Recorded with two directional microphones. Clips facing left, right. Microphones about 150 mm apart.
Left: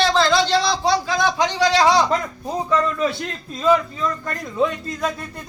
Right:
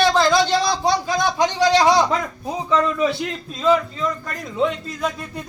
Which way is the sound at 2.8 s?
5° right (ahead or behind).